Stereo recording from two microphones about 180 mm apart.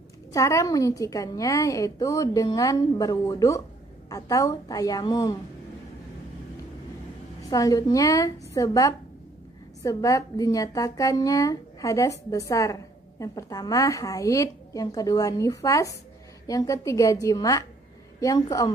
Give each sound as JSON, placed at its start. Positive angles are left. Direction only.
{"t": 0.3, "sound": "speech", "side_deg": 15}
{"t": 7.4, "sound": "a woman's voice", "side_deg": 20}